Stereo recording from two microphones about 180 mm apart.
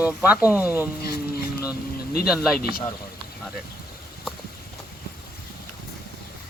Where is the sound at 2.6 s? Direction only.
55° left (ahead or behind).